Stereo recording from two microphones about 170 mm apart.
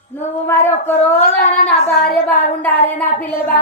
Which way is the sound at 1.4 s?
40° left (ahead or behind).